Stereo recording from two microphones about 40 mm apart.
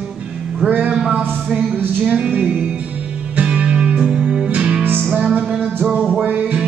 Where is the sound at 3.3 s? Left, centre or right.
Right.